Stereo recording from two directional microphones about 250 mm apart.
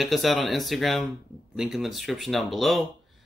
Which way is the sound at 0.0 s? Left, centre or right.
Centre.